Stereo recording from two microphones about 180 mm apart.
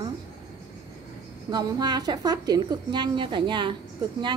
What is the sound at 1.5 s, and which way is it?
A woman's voice, 25° right (ahead or behind).